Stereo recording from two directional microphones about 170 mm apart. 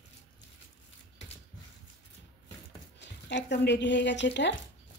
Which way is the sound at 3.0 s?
90° left.